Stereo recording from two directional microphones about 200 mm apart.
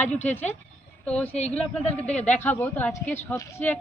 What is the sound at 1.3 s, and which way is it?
Speech, 30° left (ahead or behind).